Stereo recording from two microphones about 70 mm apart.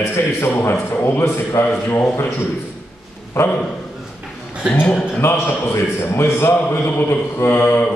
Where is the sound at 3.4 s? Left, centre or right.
Left.